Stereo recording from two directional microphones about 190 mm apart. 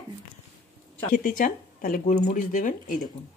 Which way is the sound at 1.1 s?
45° left (ahead or behind).